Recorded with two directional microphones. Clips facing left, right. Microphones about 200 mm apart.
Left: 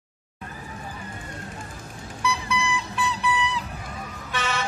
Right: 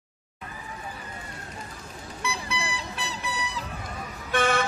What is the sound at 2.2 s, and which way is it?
Vehicle, 35° right (ahead or behind).